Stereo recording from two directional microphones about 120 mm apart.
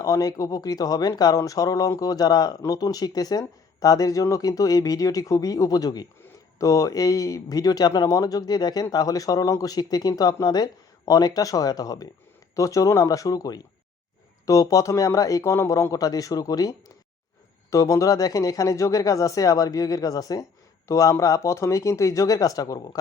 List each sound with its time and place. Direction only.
0.0 s speech: 30° left (ahead or behind)